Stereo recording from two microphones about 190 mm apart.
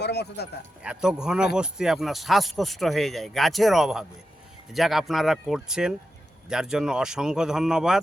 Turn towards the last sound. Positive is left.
turn(degrees=0)  # may be behind; listen again after turning